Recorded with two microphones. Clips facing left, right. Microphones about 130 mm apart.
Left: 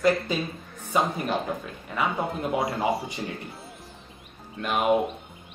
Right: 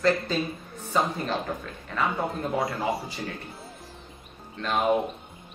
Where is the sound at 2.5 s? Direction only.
25° left (ahead or behind).